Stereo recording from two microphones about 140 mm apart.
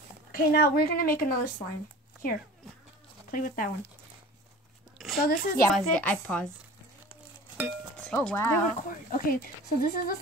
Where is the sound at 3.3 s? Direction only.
80° left.